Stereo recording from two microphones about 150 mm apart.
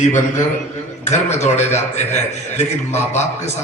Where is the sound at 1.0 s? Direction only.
50° left (ahead or behind).